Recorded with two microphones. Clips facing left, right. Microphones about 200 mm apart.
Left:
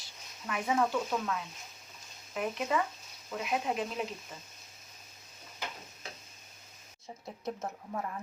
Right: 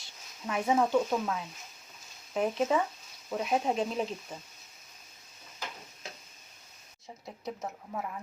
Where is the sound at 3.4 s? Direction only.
30° right (ahead or behind).